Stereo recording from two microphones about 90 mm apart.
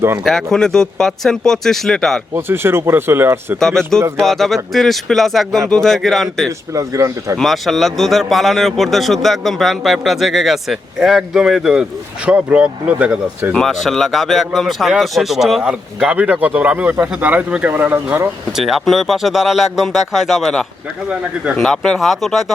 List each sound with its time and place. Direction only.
0.5 s speech: 5° left (ahead or behind)
2.3 s speech: 25° right (ahead or behind)
3.6 s speech: 5° left (ahead or behind)
6.7 s speech: 35° right (ahead or behind)
7.3 s speech: centre (ahead or behind); by 13.5 s 15° right (ahead or behind)
13.5 s speech: 5° left (ahead or behind)
15.6 s speech: 10° right (ahead or behind)
18.5 s speech: centre (ahead or behind)